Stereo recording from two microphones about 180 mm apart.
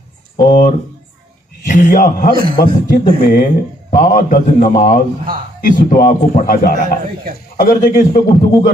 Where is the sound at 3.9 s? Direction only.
50° left (ahead or behind).